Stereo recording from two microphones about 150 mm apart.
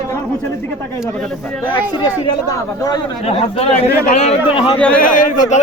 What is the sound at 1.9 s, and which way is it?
Speech, 30° left (ahead or behind).